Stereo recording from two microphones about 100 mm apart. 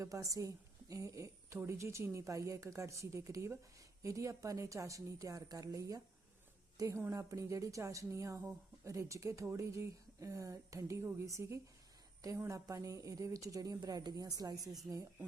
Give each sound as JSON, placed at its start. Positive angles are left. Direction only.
{"t": 0.0, "sound": "a woman's voice", "side_deg": -35}